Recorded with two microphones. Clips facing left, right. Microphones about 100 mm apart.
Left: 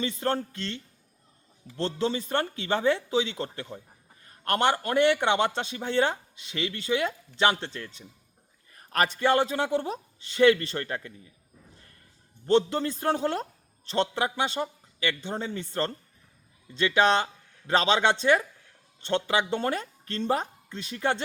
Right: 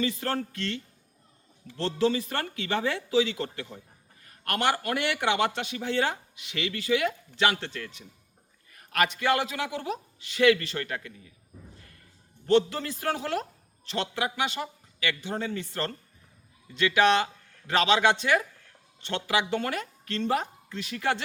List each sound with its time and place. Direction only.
0.0 s a man's voice: 25° left (ahead or behind)
12.5 s a man's voice: 25° left (ahead or behind)